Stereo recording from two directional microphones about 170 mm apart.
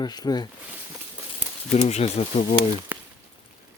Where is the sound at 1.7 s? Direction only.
40° left (ahead or behind).